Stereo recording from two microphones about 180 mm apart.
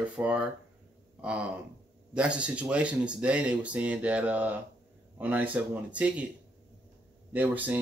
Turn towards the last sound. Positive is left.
turn(degrees=-10)  # may be behind; listen again after turning